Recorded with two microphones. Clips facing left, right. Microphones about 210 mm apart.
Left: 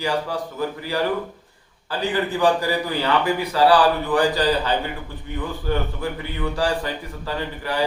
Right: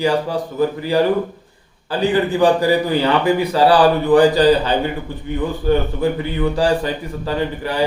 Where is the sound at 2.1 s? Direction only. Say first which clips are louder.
Right 5 dB; 20° right (ahead or behind).